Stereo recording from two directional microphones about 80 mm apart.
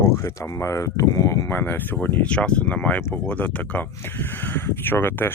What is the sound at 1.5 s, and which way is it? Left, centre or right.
Speech, left.